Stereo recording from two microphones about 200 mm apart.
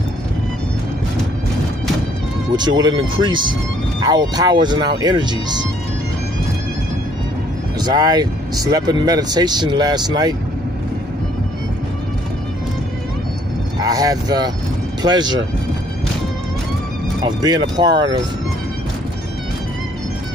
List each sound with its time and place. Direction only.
2.5 s speech: 20° right (ahead or behind)
7.8 s speech: 20° right (ahead or behind)
13.7 s speech: 20° right (ahead or behind)
17.2 s speech: 20° right (ahead or behind)